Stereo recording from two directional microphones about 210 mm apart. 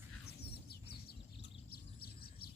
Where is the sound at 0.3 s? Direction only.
50° left (ahead or behind).